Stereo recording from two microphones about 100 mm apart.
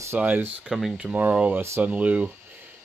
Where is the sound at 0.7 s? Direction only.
5° right (ahead or behind).